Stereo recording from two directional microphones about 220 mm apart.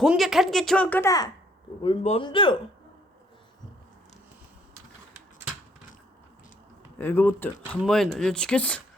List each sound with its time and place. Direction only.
0.0 s speech: centre (ahead or behind); by 2.6 s 20° left (ahead or behind)
7.0 s speech: 10° left (ahead or behind)